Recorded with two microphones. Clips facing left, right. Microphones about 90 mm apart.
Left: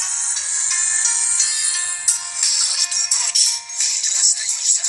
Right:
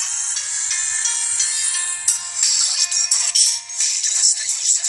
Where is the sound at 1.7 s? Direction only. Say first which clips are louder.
Left 1 dB; 10° left (ahead or behind).